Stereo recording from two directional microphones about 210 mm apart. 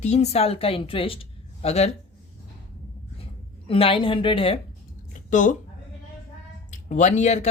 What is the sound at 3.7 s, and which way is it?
Speech, 25° left (ahead or behind).